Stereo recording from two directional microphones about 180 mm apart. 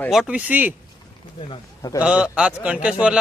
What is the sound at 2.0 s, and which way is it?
Speech, 5° right (ahead or behind).